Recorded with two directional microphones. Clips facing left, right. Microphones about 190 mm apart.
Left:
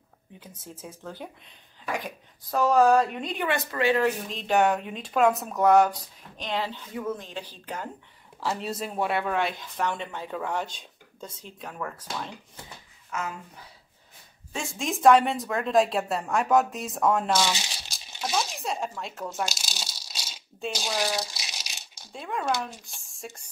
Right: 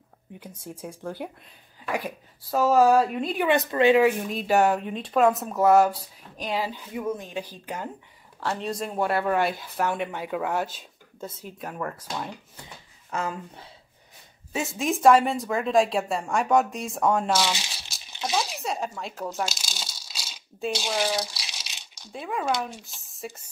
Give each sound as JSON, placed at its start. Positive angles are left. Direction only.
{"t": 0.4, "sound": "speech", "side_deg": -10}
{"t": 3.4, "sound": "speech", "side_deg": -20}
{"t": 8.4, "sound": "speech", "side_deg": 5}
{"t": 13.1, "sound": "speech", "side_deg": -30}
{"t": 14.5, "sound": "speech", "side_deg": -5}
{"t": 18.2, "sound": "a sound", "side_deg": 0}
{"t": 22.1, "sound": "speech", "side_deg": 0}